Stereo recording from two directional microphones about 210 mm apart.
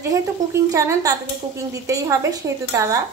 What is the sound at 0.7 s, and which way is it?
Speech, 15° right (ahead or behind).